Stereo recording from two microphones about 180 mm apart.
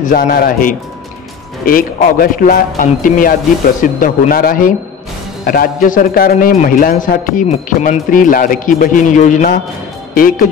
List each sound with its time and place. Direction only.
0.0 s a man's voice: 55° left (ahead or behind)